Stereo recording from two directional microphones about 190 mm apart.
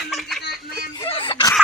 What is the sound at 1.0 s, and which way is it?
Snicker, 25° left (ahead or behind).